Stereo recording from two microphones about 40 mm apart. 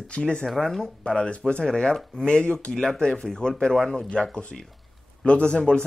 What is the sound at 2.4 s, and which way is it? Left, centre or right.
Speech, left.